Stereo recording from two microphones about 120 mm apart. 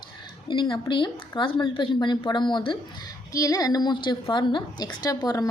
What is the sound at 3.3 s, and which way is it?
A woman's voice, 30° left (ahead or behind).